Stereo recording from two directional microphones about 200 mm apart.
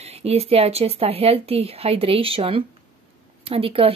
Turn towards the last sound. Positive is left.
turn(degrees=-30)  # may be behind; listen again after turning